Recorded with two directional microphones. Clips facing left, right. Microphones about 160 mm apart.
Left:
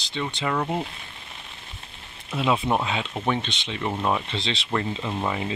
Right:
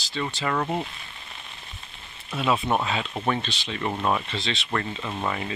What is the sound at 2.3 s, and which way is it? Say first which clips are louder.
Speech: left 1 dB; 20° left (ahead or behind).